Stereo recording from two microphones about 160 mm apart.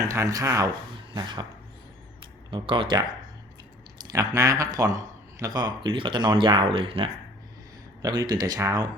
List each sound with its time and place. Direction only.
0.1 s speech: 20° right (ahead or behind)
0.9 s cough: 25° right (ahead or behind)
2.2 s speech: 30° right (ahead or behind)
4.1 s speech: 20° right (ahead or behind)